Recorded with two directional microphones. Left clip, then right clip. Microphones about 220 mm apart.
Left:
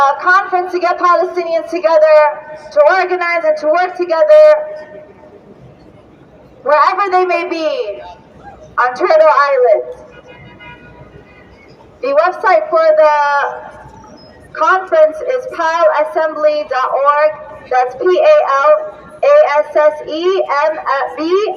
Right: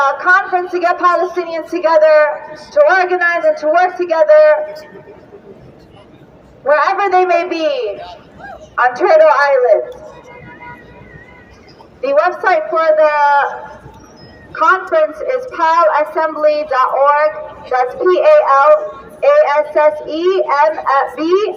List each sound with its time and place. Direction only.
0.0 s a woman's voice: 10° left (ahead or behind)
6.7 s a woman's voice: 10° left (ahead or behind)
11.9 s a man's voice: 5° left (ahead or behind)
14.5 s a woman's voice: 5° right (ahead or behind)